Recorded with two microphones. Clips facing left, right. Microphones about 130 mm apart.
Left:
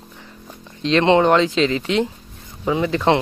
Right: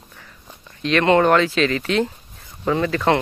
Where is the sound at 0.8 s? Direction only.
25° left (ahead or behind).